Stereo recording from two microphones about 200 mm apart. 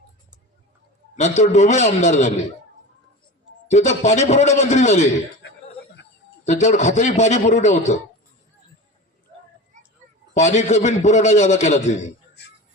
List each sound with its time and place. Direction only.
1.1 s a man's voice: 35° left (ahead or behind)
3.7 s a man's voice: 35° left (ahead or behind)
6.4 s a man's voice: 35° left (ahead or behind)
9.7 s a sound: 40° right (ahead or behind)
10.3 s a man's voice: 35° left (ahead or behind)